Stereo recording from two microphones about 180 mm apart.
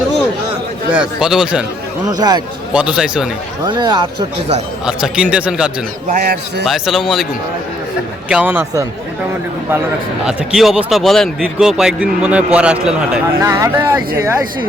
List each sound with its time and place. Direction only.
0.9 s speech: 5° right (ahead or behind)
2.0 s speech: 20° right (ahead or behind)
2.7 s speech: 5° right (ahead or behind)
3.6 s speech: 25° right (ahead or behind)
4.9 s speech: 5° right (ahead or behind)
6.2 s a man's voice: 60° right (ahead or behind)
6.7 s speech: centre (ahead or behind)
8.3 s speech: 10° right (ahead or behind)
10.2 s speech: centre (ahead or behind)
13.4 s speech: 20° right (ahead or behind)